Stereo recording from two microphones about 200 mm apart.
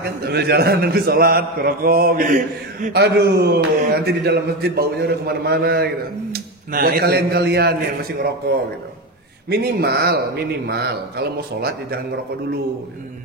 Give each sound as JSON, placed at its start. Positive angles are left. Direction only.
{"t": 0.0, "sound": "a man's voice", "side_deg": -55}